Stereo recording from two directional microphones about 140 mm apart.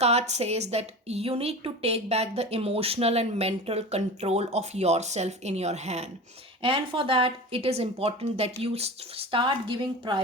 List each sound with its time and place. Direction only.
0.0 s a woman's voice: 50° right (ahead or behind)
6.6 s speech: 40° right (ahead or behind)